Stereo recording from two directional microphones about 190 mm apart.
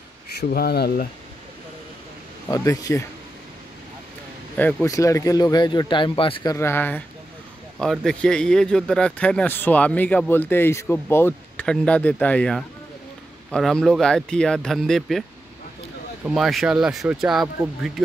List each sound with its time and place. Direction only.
0.4 s speech: 55° left (ahead or behind)
2.4 s a man's voice: 15° left (ahead or behind)
4.6 s speech: 10° left (ahead or behind); by 6.5 s 30° left (ahead or behind)
6.5 s a man's voice: 15° left (ahead or behind)
16.3 s speech: centre (ahead or behind)